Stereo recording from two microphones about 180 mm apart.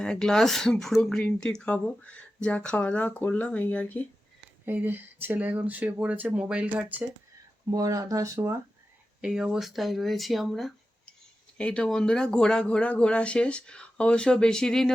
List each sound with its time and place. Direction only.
0.0 s speech: 5° left (ahead or behind)
4.6 s speech: 10° right (ahead or behind)
7.7 s speech: 20° right (ahead or behind)
9.2 s speech: 5° right (ahead or behind)